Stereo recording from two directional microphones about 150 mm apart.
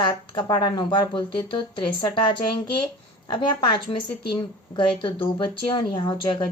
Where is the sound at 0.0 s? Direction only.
30° left (ahead or behind).